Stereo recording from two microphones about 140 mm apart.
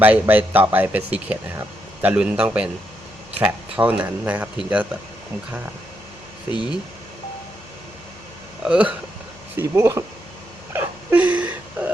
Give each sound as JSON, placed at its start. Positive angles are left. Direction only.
{"t": 0.0, "sound": "speech", "side_deg": -10}
{"t": 8.6, "sound": "speech", "side_deg": -10}
{"t": 9.6, "sound": "speech", "side_deg": -20}
{"t": 10.7, "sound": "a sound", "side_deg": -15}